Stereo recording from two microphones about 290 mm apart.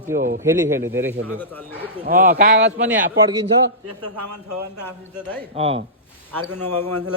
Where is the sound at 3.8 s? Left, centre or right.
Right.